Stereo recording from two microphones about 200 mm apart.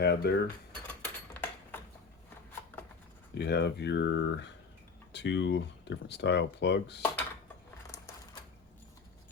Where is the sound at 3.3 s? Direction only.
55° left (ahead or behind).